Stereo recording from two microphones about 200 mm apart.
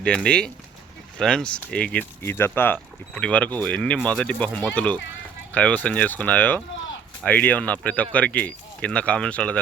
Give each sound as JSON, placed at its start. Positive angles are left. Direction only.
{"t": 0.0, "sound": "speech", "side_deg": 5}